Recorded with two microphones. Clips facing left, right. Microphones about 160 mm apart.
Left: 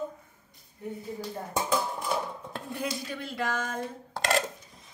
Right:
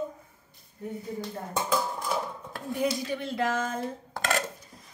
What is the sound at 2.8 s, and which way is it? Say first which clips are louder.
Speech: right 6 dB; 20° right (ahead or behind).